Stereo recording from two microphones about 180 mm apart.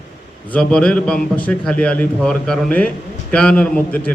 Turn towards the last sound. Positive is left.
turn(degrees=5)  # may be behind; listen again after turning